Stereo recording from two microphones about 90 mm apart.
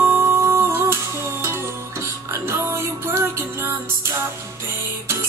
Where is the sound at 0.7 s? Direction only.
30° right (ahead or behind).